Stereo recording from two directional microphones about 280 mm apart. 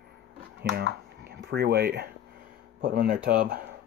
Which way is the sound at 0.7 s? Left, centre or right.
Right.